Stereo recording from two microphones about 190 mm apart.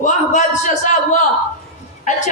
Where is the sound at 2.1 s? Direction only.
40° left (ahead or behind).